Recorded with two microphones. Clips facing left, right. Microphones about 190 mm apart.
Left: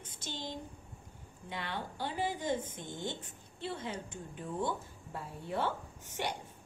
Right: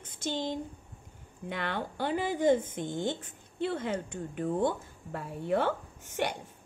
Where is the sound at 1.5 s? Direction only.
60° right (ahead or behind).